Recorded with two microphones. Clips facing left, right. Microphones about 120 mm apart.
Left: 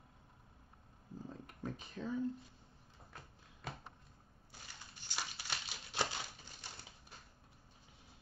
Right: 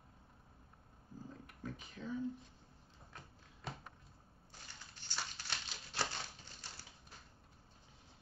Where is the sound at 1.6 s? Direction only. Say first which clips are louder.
Left 3 dB; 35° left (ahead or behind).